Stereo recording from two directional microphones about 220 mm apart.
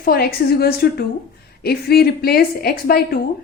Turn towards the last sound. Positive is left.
turn(degrees=45)  # may be behind; listen again after turning